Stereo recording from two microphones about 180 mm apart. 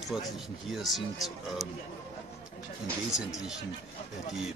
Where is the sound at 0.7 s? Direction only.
Centre (ahead or behind).